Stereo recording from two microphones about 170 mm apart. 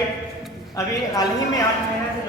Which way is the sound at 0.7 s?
20° left (ahead or behind).